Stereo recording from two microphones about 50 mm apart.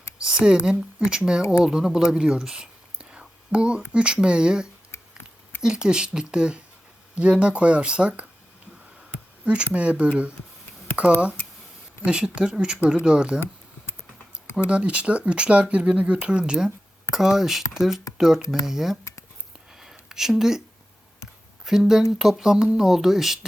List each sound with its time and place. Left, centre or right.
0.3 s speech: centre
4.9 s a sound: left
5.6 s speech: centre
9.4 s speech: right
14.7 s speech: right; by 18.9 s centre
19.7 s a sound: centre
21.6 s speech: centre